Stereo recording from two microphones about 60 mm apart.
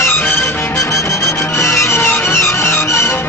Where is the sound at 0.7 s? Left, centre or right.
Left.